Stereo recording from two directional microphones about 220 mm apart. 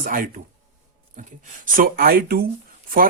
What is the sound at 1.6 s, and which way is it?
Speech, 40° right (ahead or behind).